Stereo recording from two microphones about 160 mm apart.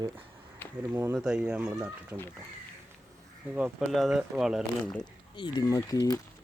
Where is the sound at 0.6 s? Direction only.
15° left (ahead or behind).